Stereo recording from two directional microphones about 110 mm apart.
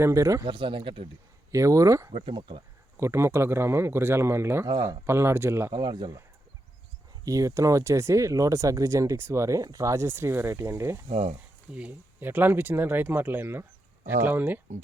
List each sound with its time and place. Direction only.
0.0 s speech: 30° right (ahead or behind)
0.4 s speech: 50° right (ahead or behind)
1.5 s speech: 30° right (ahead or behind)
2.2 s speech: 50° right (ahead or behind)
3.0 s speech: 25° right (ahead or behind)
4.7 s speech: 35° right (ahead or behind)
5.0 s speech: 25° right (ahead or behind)
5.7 s speech: 40° right (ahead or behind)
7.3 s speech: 30° right (ahead or behind)
11.1 s speech: 85° right
11.7 s speech: 15° right (ahead or behind)